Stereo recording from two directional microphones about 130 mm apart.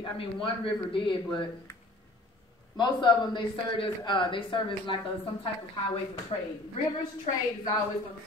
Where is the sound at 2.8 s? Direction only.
35° left (ahead or behind).